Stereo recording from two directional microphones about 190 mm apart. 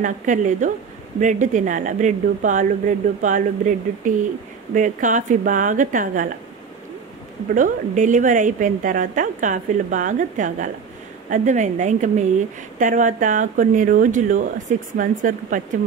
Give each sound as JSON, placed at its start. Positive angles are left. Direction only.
{"t": 0.0, "sound": "a woman's voice", "side_deg": -40}
{"t": 7.5, "sound": "a woman's voice", "side_deg": -40}